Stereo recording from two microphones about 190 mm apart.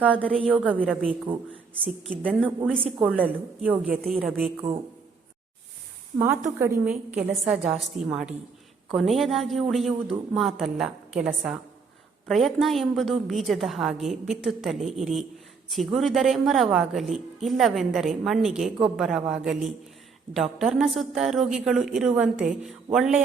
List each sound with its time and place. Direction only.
0.4 s a woman's voice: 5° right (ahead or behind)
0.7 s a woman's voice: 5° left (ahead or behind)
6.1 s a woman's voice: 10° right (ahead or behind)